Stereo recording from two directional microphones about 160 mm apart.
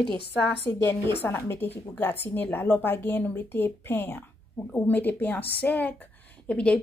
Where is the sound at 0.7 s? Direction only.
20° left (ahead or behind).